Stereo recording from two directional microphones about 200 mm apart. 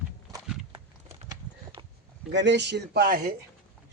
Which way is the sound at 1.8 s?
25° right (ahead or behind).